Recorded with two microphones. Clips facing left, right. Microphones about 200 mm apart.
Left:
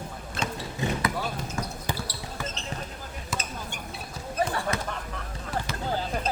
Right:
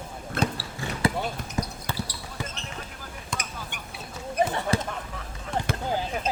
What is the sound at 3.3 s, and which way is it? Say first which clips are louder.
Basketball bounce: left 1 dB; 5° left (ahead or behind).